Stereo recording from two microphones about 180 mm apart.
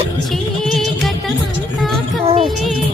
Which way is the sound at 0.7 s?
Centre (ahead or behind).